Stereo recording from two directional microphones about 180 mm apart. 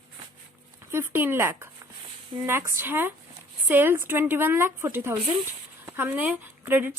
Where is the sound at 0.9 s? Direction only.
10° right (ahead or behind).